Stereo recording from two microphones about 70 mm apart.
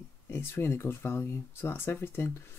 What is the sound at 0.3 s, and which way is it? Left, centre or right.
Speech, left.